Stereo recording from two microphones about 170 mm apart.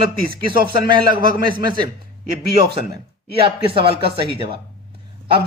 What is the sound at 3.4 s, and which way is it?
Speech, 30° right (ahead or behind).